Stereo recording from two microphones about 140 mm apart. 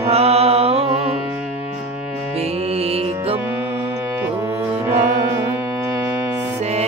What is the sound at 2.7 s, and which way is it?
Music, 45° right (ahead or behind).